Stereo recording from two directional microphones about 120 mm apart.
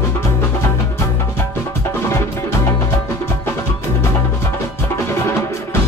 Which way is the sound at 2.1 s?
20° left (ahead or behind).